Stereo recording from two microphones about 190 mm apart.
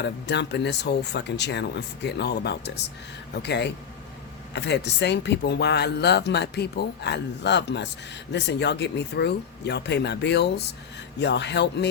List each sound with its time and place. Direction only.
0.0 s speech: 65° left (ahead or behind)